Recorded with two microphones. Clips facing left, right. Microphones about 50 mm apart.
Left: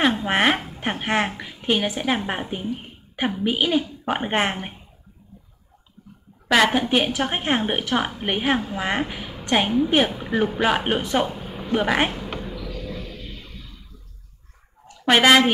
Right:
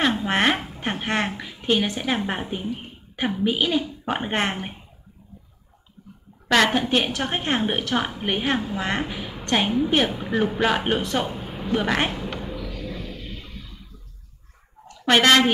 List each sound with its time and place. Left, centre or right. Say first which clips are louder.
0.0 s a woman's voice: left 1 dB; centre
6.0 s bathtub: right 1 dB; centre
6.5 s a woman's voice: left 1 dB; centre
11.3 s a sound: right 1 dB; centre
11.7 s a woman's voice: left 2 dB; centre
12.4 s a sound: right 1 dB; centre
12.7 s music: even; centre
15.0 s a woman's voice: left 1 dB; centre